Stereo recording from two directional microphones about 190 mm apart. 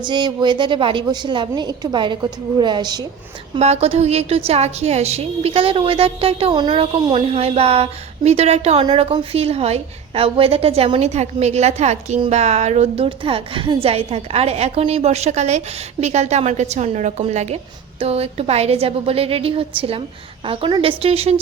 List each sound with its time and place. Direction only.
0.0 s a woman's voice: 25° right (ahead or behind)
3.5 s a woman's voice: 35° right (ahead or behind)